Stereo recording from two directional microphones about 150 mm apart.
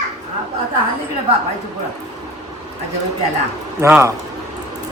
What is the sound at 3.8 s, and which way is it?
Speech, 15° right (ahead or behind).